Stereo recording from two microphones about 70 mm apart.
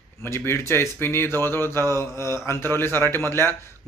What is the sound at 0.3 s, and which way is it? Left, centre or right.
A man's voice, left.